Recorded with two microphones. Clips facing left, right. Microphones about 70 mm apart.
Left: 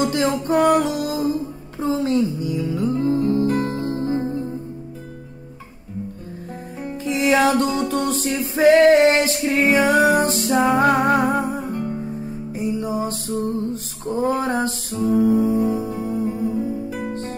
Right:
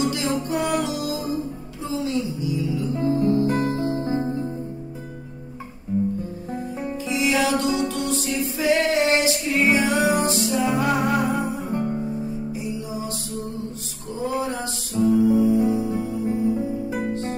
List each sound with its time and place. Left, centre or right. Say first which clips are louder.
0.0 s music: left 4 dB; left
3.4 s music: left 1 dB; centre
3.7 s music: even; left
7.1 s music: left 5 dB; left